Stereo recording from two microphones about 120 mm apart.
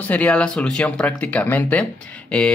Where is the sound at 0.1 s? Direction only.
10° left (ahead or behind).